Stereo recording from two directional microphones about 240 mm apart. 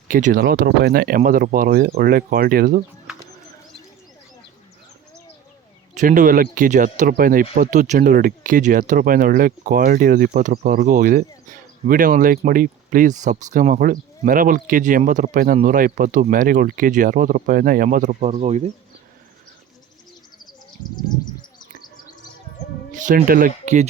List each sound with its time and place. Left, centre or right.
0.1 s speech: right
3.1 s bird: centre
5.9 s speech: right
20.9 s a sound: centre
22.9 s speech: right